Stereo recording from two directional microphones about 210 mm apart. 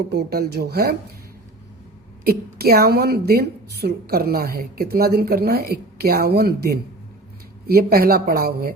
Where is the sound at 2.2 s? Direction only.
45° right (ahead or behind).